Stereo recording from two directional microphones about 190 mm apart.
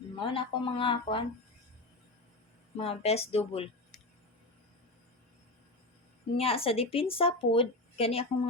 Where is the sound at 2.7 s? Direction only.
30° left (ahead or behind).